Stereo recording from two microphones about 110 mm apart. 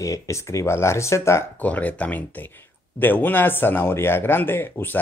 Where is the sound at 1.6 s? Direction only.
15° left (ahead or behind).